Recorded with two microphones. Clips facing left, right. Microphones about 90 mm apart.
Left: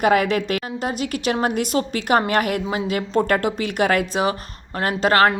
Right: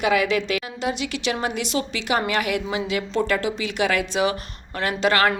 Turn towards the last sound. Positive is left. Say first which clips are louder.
# left 3 dB
turn(degrees=40)  # may be behind; listen again after turning